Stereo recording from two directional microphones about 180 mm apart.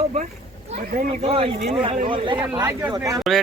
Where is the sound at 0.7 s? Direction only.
40° right (ahead or behind); by 3.2 s 20° right (ahead or behind).